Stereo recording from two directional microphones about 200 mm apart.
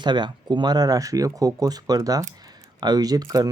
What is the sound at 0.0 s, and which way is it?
Speech, 20° right (ahead or behind).